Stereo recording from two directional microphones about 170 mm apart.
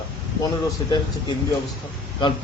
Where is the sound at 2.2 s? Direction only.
30° left (ahead or behind).